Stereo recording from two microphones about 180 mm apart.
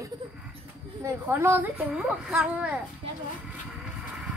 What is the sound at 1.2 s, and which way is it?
A woman's voice, 10° right (ahead or behind).